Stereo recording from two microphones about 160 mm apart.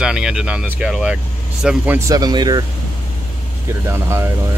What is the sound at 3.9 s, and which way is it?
Speech, 15° right (ahead or behind).